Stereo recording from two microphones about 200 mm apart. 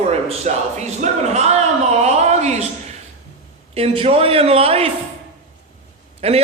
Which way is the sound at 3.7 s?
30° right (ahead or behind).